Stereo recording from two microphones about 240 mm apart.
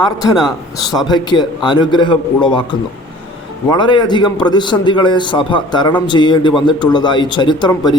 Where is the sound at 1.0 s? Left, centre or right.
Centre.